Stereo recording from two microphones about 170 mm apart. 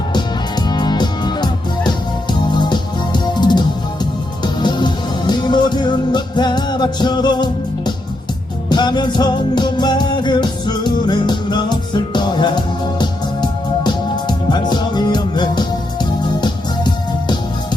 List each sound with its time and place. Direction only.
0.7 s music: 25° left (ahead or behind)